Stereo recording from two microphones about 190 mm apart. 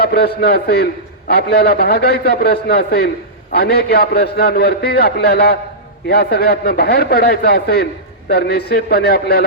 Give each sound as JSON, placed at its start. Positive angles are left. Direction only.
{"t": 0.0, "sound": "a man's voice", "side_deg": 55}